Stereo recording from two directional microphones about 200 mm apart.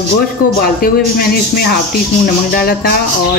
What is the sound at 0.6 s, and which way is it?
Speech, 50° left (ahead or behind).